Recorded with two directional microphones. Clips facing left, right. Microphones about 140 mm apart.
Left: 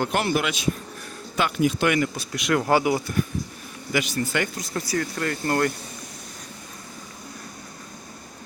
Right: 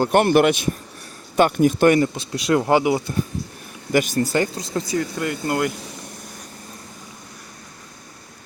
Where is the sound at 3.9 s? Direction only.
45° right (ahead or behind); by 5.7 s 10° right (ahead or behind).